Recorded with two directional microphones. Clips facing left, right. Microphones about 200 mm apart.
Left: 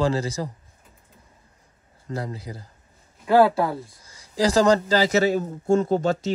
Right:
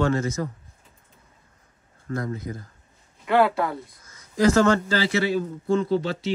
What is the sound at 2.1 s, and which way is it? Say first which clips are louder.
A man's voice: right 2 dB; 30° left (ahead or behind).